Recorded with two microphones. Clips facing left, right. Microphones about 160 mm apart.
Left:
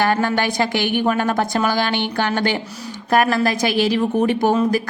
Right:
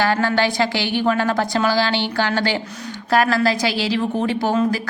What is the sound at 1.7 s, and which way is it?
Speech, 55° left (ahead or behind).